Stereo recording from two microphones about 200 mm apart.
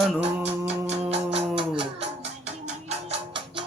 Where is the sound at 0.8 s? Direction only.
30° right (ahead or behind).